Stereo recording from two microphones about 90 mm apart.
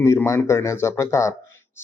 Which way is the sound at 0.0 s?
30° left (ahead or behind).